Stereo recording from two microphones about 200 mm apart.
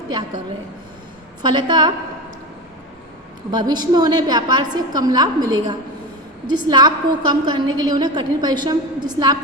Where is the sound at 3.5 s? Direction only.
20° right (ahead or behind).